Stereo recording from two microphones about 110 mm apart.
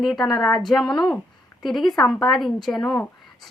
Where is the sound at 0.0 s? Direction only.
Centre (ahead or behind).